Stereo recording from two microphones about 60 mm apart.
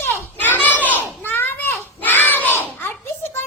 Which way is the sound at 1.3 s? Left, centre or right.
Left.